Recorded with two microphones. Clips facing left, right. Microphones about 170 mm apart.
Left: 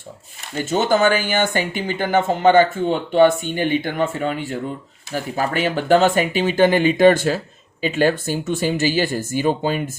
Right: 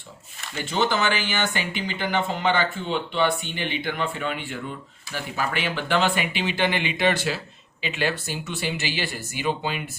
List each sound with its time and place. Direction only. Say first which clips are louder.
0.5 s speech: left 6 dB; 45° left (ahead or behind)